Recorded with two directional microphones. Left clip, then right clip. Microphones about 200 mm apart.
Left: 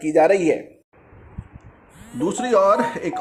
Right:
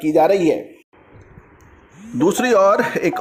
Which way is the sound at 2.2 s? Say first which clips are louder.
Right 3 dB; 35° right (ahead or behind).